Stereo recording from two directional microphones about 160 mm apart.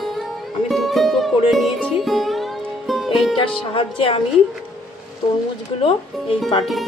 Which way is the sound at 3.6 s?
35° left (ahead or behind).